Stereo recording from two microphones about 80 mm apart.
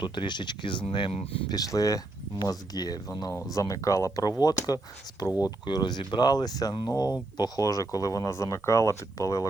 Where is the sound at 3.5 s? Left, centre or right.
Left.